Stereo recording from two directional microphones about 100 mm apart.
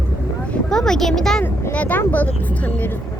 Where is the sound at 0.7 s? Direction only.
5° left (ahead or behind).